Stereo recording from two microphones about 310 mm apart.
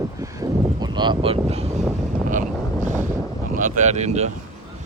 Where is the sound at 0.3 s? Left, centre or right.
Centre.